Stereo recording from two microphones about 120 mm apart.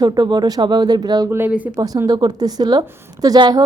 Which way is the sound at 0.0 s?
35° right (ahead or behind).